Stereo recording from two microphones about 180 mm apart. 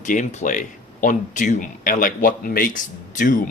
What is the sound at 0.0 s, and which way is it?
Speech, 45° left (ahead or behind).